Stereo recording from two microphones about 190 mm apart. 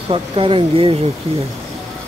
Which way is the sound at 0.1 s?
25° right (ahead or behind).